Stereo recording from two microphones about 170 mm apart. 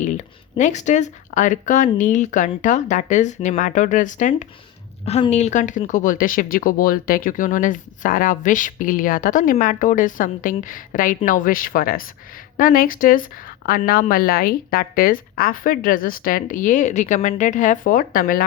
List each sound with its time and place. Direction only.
0.0 s a woman's voice: 45° left (ahead or behind)